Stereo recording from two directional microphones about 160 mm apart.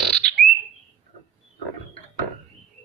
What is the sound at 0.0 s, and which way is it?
Bird, centre (ahead or behind).